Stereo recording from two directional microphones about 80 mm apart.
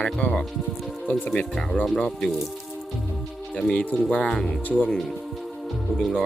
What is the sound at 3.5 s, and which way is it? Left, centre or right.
Speech, centre.